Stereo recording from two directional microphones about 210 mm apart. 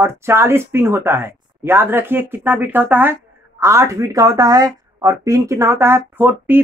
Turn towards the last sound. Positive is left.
turn(degrees=-10)  # may be behind; listen again after turning